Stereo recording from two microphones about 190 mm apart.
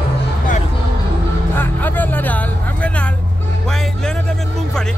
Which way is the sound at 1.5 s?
10° left (ahead or behind).